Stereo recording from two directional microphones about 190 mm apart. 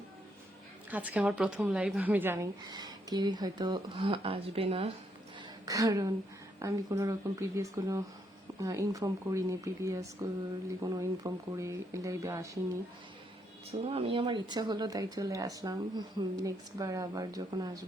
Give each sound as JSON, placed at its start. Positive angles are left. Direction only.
{"t": 0.9, "sound": "speech", "side_deg": -10}
{"t": 5.6, "sound": "speech", "side_deg": -20}
{"t": 13.7, "sound": "speech", "side_deg": -30}